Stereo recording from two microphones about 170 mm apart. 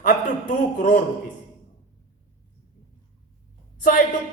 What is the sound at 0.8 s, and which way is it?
Speech, 45° left (ahead or behind).